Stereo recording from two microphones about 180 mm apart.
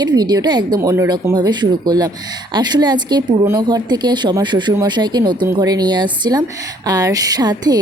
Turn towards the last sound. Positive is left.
turn(degrees=-20)  # may be behind; listen again after turning